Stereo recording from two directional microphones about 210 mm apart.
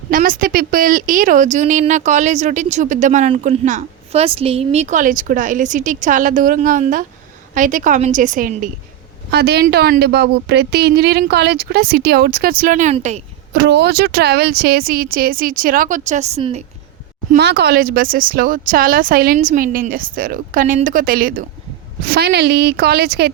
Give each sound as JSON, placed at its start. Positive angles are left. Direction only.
{"t": 0.1, "sound": "a woman's voice", "side_deg": -40}
{"t": 13.5, "sound": "speech", "side_deg": -50}
{"t": 17.3, "sound": "speech", "side_deg": -50}